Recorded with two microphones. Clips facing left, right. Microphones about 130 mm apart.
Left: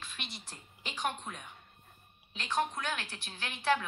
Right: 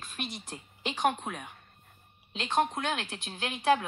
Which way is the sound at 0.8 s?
70° right (ahead or behind).